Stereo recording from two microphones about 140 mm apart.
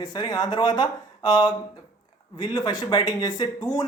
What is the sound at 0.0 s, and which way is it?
Speech, 30° left (ahead or behind).